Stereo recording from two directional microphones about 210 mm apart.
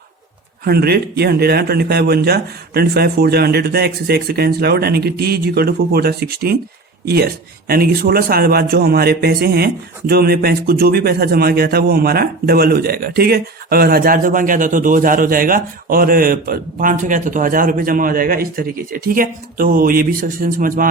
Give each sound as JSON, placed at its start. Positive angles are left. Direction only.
{"t": 0.6, "sound": "speech", "side_deg": -50}